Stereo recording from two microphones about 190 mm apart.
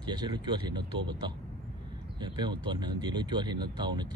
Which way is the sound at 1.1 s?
25° right (ahead or behind).